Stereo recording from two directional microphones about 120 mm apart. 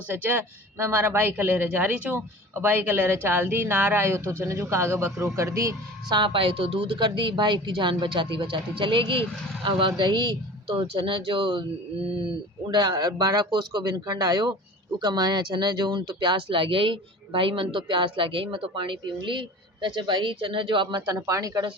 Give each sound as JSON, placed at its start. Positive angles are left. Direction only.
{"t": 0.1, "sound": "speech", "side_deg": -15}
{"t": 6.1, "sound": "speech", "side_deg": -45}
{"t": 12.6, "sound": "speech", "side_deg": -35}
{"t": 21.2, "sound": "speech", "side_deg": -30}